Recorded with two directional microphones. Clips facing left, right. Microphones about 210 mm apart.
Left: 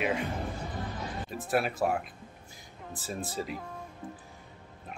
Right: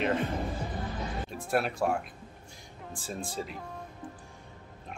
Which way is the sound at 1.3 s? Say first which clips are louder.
Left 1 dB; 5° left (ahead or behind).